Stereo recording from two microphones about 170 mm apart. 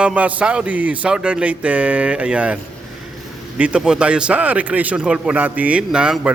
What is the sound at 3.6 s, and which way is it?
Speech, 5° right (ahead or behind).